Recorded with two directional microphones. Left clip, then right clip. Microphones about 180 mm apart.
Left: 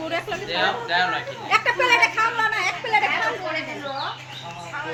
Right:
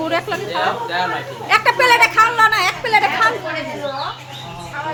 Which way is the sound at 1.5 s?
10° right (ahead or behind).